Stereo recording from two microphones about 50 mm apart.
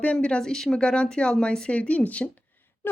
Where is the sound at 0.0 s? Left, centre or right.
Left.